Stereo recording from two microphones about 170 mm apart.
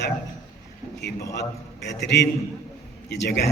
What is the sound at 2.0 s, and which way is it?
A man's voice, 85° left.